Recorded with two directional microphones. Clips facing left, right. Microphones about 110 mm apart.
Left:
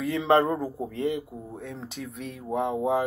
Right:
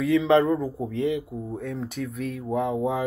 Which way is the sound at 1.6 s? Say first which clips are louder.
Right 5 dB; 15° left (ahead or behind).